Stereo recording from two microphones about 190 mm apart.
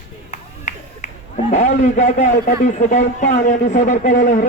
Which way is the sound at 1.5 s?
40° left (ahead or behind).